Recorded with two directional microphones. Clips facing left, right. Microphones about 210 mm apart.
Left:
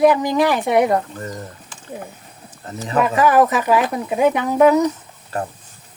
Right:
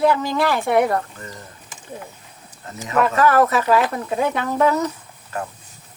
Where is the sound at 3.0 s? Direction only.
15° left (ahead or behind).